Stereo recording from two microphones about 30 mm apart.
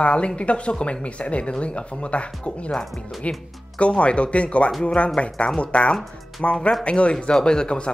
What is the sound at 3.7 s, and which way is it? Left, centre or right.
Speech, left.